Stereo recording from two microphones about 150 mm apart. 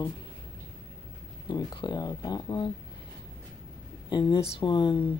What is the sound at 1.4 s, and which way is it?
Speech, 30° left (ahead or behind).